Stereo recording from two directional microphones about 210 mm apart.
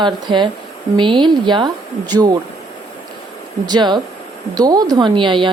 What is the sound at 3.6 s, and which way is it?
A woman's voice, 20° right (ahead or behind).